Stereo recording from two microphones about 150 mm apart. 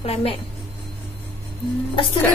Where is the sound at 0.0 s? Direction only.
40° left (ahead or behind).